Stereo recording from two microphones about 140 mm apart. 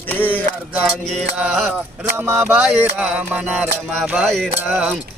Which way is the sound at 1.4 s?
10° right (ahead or behind).